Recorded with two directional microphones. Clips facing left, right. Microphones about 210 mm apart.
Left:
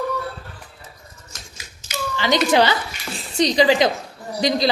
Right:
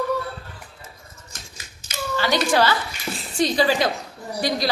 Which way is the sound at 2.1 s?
20° left (ahead or behind).